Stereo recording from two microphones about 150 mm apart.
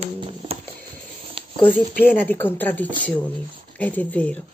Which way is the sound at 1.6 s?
10° left (ahead or behind).